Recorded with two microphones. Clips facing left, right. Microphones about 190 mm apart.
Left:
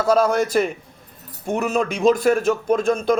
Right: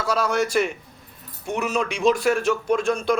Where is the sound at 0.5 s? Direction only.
40° left (ahead or behind).